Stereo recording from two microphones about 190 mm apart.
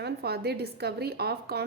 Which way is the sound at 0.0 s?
60° right (ahead or behind).